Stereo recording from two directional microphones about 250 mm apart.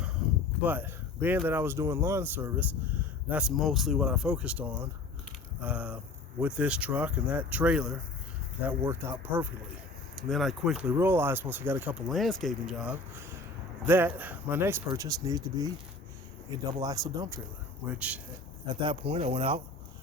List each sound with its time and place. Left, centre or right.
0.6 s speech: centre
18.6 s speech: centre